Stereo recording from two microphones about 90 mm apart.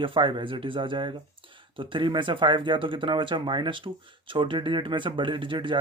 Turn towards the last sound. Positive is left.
turn(degrees=-70)  # may be behind; listen again after turning